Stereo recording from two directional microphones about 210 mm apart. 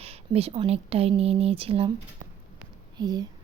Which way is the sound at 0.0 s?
30° right (ahead or behind).